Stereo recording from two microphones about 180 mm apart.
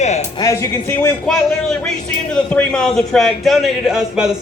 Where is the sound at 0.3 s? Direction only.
15° left (ahead or behind).